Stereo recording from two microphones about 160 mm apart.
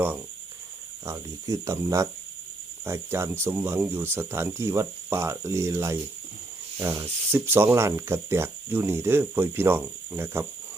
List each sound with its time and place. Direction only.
1.0 s speech: 20° right (ahead or behind)